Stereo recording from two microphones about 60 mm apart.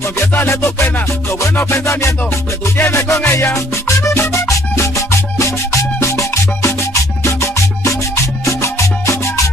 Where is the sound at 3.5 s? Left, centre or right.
Left.